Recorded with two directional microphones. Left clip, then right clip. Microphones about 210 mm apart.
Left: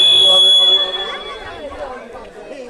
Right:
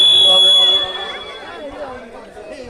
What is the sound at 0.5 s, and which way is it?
Fire alarm, 30° right (ahead or behind).